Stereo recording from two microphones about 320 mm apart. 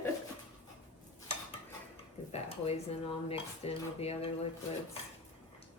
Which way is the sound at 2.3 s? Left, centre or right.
Centre.